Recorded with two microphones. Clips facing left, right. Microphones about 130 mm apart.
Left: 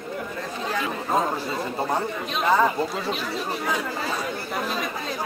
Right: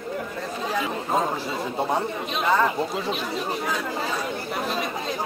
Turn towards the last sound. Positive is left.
turn(degrees=0)  # may be behind; listen again after turning